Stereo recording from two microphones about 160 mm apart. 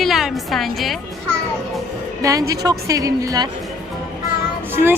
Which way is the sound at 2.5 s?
20° right (ahead or behind).